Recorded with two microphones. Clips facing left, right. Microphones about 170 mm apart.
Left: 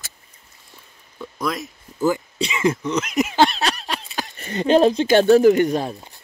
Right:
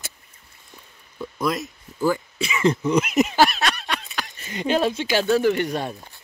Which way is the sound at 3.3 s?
25° left (ahead or behind).